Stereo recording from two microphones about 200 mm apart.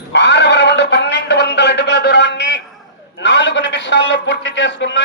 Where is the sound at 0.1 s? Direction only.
60° left (ahead or behind).